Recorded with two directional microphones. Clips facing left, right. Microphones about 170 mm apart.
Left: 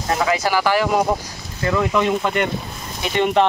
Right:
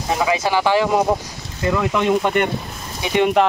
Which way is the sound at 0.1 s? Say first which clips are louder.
Even; 10° right (ahead or behind).